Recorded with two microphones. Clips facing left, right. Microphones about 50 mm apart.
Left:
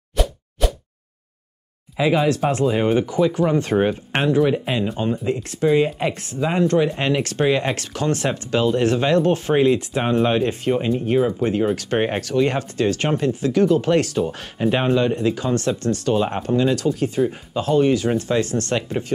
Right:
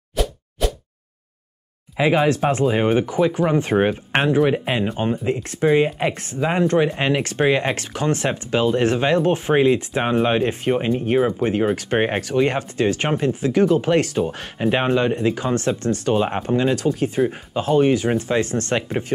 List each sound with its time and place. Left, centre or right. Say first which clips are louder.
0.1 s whack: even; centre
2.0 s speech: right 1 dB; right